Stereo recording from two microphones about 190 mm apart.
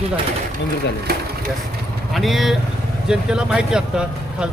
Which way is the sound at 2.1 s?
Centre (ahead or behind).